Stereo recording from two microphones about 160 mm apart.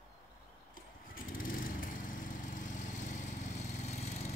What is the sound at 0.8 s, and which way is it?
Lawn mower, 60° left (ahead or behind).